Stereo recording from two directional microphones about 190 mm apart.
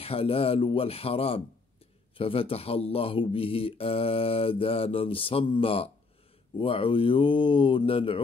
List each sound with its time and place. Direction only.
0.0 s speech: 30° left (ahead or behind)